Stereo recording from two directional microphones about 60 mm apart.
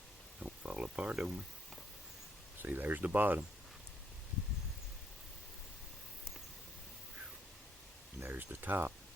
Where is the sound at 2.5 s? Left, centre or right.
Right.